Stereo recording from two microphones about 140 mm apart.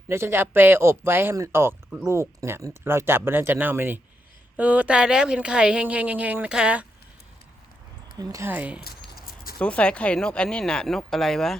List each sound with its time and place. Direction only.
0.1 s a woman's voice: 20° right (ahead or behind)
8.2 s a woman's voice: 20° right (ahead or behind)
8.8 s a sound: 90° left
9.6 s speech: 10° left (ahead or behind)